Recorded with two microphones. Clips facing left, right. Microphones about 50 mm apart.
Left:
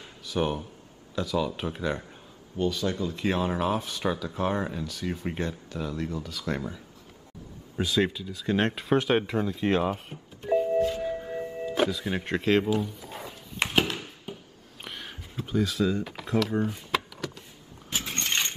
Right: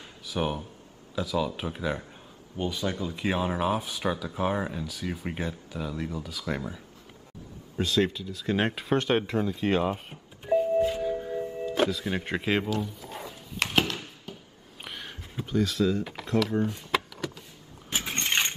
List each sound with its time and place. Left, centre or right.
0.0 s speech: centre
2.5 s speech: centre
11.0 s music: centre
11.6 s speech: centre
12.6 s speech: centre
13.6 s a sound: left
14.8 s a sound: centre
15.4 s speech: centre
17.9 s vehicle: centre